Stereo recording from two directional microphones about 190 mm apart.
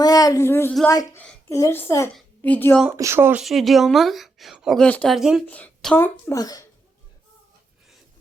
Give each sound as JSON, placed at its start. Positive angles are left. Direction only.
{"t": 0.0, "sound": "speech", "side_deg": 20}
{"t": 1.2, "sound": "a sound", "side_deg": 5}
{"t": 1.5, "sound": "a child's voice", "side_deg": 15}
{"t": 3.0, "sound": "speech", "side_deg": -15}
{"t": 3.4, "sound": "a woman's voice", "side_deg": 0}